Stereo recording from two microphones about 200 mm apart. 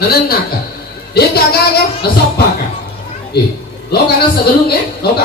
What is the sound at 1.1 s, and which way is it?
Speech, 50° left (ahead or behind).